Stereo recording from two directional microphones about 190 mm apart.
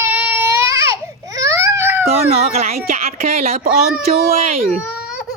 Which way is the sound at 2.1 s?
35° right (ahead or behind).